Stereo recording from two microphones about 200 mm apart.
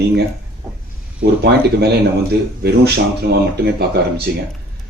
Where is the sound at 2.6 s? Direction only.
55° right (ahead or behind).